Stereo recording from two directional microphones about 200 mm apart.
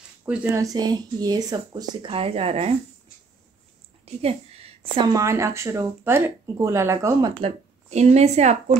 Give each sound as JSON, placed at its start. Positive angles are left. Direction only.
{"t": 0.2, "sound": "speech", "side_deg": -5}
{"t": 4.0, "sound": "a woman's voice", "side_deg": -30}
{"t": 7.9, "sound": "a woman's voice", "side_deg": -35}